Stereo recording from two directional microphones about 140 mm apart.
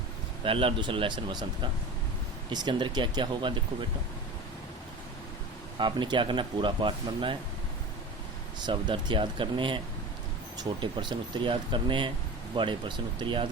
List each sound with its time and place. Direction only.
0.4 s speech: 40° right (ahead or behind)
5.8 s speech: 35° right (ahead or behind)
8.5 s speech: 30° right (ahead or behind)